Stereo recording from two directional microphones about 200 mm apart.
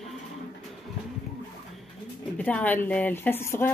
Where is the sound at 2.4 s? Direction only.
5° left (ahead or behind).